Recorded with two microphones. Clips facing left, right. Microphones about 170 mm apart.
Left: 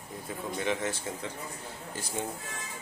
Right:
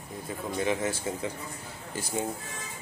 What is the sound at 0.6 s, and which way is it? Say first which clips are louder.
Speech: right 3 dB; 5° right (ahead or behind).